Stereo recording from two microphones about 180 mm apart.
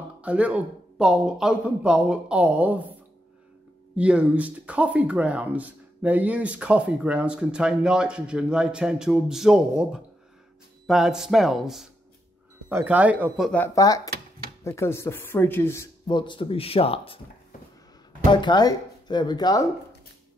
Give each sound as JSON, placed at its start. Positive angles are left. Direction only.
{"t": 0.2, "sound": "speech", "side_deg": -10}
{"t": 3.9, "sound": "speech", "side_deg": -5}
{"t": 13.7, "sound": "speech", "side_deg": 20}
{"t": 16.1, "sound": "speech", "side_deg": 25}
{"t": 18.2, "sound": "speech", "side_deg": 25}